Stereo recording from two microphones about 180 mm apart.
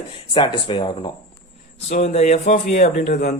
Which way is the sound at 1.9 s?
40° left (ahead or behind).